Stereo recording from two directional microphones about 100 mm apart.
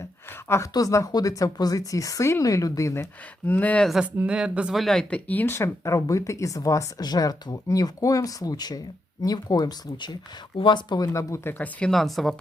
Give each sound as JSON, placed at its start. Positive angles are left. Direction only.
{"t": 0.4, "sound": "a woman's voice", "side_deg": 25}
{"t": 3.5, "sound": "speech", "side_deg": 15}
{"t": 4.0, "sound": "speech", "side_deg": -10}
{"t": 5.3, "sound": "speech", "side_deg": 20}
{"t": 11.5, "sound": "speech", "side_deg": 15}
{"t": 11.9, "sound": "speech", "side_deg": 0}